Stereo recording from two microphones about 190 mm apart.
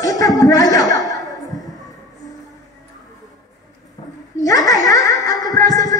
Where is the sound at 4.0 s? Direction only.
20° left (ahead or behind).